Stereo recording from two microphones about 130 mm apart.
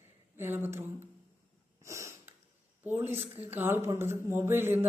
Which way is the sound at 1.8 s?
20° right (ahead or behind).